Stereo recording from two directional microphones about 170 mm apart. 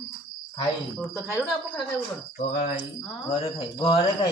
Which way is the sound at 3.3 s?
35° left (ahead or behind).